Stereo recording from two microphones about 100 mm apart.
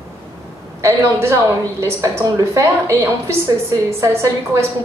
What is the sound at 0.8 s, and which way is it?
A woman's voice, 30° right (ahead or behind).